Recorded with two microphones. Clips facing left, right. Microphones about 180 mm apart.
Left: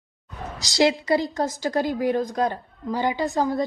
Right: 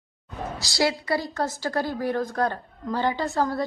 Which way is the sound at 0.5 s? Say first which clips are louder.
Left 5 dB; 20° left (ahead or behind).